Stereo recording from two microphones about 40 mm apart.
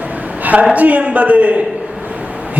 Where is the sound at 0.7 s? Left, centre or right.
Right.